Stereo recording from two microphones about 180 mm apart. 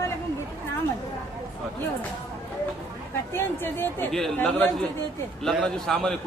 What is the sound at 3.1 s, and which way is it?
A man's voice, 10° left (ahead or behind).